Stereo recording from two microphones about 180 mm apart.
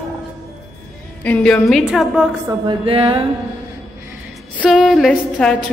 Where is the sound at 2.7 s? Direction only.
30° right (ahead or behind).